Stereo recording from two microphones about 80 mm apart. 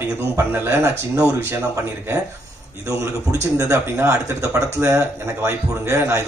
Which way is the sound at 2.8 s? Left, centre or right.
Right.